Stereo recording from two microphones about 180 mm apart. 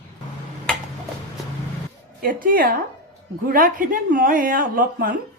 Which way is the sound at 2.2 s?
50° right (ahead or behind).